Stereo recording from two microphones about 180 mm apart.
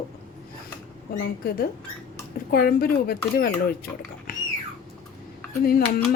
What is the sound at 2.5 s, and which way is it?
Speech, 55° left (ahead or behind).